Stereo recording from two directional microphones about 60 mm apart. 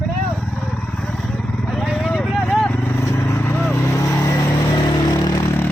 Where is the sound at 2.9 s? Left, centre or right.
Left.